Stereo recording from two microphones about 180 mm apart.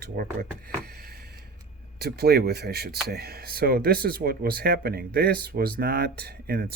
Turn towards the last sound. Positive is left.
turn(degrees=-60)  # may be behind; listen again after turning